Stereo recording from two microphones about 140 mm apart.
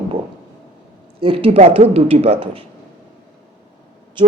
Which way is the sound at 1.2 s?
40° right (ahead or behind).